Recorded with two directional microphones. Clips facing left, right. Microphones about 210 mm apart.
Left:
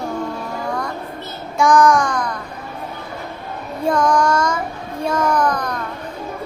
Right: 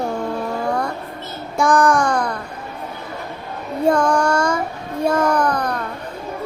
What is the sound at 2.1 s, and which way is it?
Music, 30° right (ahead or behind).